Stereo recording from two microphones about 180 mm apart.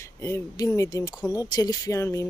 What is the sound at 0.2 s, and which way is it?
Speech, 15° left (ahead or behind).